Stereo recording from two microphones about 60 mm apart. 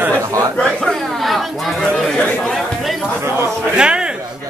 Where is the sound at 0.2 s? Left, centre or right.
Right.